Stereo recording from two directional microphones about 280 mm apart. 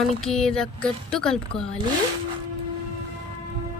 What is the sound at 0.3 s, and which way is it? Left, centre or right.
Speech, centre.